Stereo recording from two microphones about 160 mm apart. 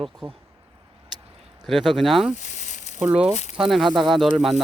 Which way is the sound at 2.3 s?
50° left (ahead or behind).